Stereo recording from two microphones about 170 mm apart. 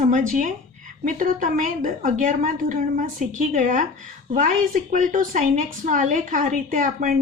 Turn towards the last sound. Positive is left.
turn(degrees=-50)  # may be behind; listen again after turning